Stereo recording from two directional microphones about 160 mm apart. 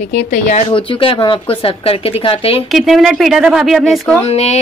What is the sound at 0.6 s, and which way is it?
Speech, 35° left (ahead or behind).